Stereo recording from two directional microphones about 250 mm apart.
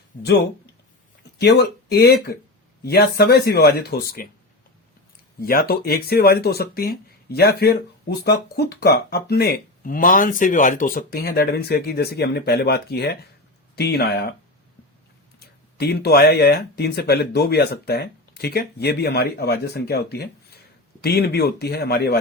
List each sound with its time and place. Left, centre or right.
1.4 s speech: left
5.4 s speech: left
15.4 s speech: left